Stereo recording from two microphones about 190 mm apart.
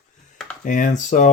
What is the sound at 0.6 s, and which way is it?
Speech, 45° left (ahead or behind).